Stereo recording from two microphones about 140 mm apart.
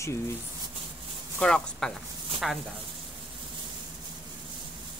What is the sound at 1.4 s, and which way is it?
Speech, 5° left (ahead or behind).